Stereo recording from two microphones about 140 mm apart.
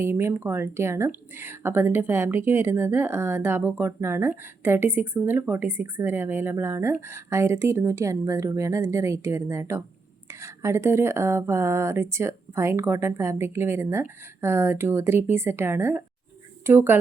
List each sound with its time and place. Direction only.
0.0 s speech: 20° right (ahead or behind)